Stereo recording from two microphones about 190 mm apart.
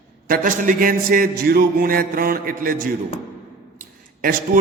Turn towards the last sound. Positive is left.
turn(degrees=-50)  # may be behind; listen again after turning